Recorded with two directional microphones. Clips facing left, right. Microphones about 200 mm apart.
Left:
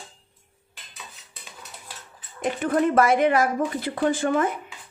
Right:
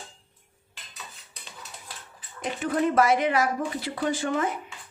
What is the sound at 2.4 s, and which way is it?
A woman's voice, 55° left (ahead or behind).